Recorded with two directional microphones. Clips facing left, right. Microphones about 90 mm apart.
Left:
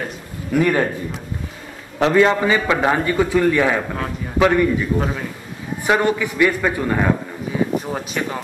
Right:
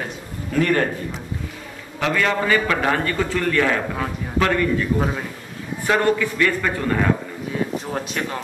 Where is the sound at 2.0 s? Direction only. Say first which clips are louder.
Left 6 dB; 30° left (ahead or behind); by 8.4 s 5° left (ahead or behind).